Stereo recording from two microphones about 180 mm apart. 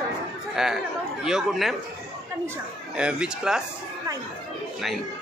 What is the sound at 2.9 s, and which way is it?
Speech, 5° right (ahead or behind).